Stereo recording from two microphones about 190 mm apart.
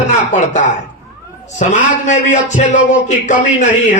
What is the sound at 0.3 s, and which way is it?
Speech, 40° left (ahead or behind).